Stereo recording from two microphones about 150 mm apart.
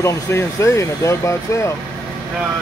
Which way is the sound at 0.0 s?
20° left (ahead or behind).